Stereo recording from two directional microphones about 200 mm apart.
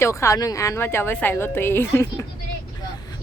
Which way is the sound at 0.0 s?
15° left (ahead or behind).